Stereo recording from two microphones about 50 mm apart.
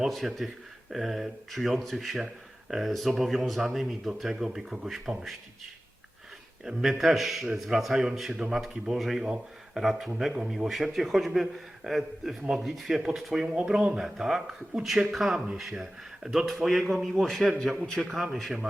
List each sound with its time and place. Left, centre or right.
0.0 s speech: centre
6.7 s speech: centre
8.3 s speech: centre
8.7 s speech: centre
10.7 s speech: centre